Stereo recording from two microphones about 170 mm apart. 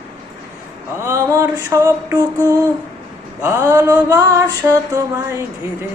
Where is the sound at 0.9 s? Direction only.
15° right (ahead or behind).